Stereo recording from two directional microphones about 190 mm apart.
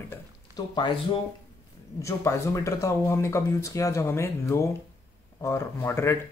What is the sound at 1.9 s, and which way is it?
Speech, 15° left (ahead or behind).